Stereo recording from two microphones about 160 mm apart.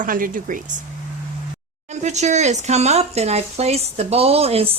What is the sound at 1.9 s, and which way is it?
A woman's voice, 45° right (ahead or behind).